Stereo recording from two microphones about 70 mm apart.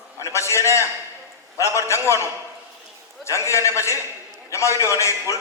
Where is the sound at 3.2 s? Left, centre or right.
Left.